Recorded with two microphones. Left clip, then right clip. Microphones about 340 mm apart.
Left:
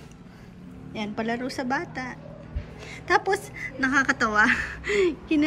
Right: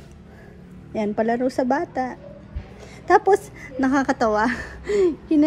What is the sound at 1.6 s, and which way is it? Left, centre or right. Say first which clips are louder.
Speech: right 6 dB; centre.